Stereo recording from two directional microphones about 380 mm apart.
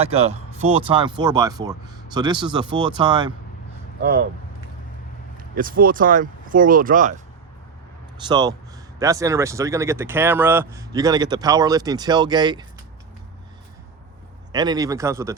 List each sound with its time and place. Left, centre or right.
0.0 s speech: centre
5.4 s speech: right
8.3 s speech: centre
14.5 s speech: centre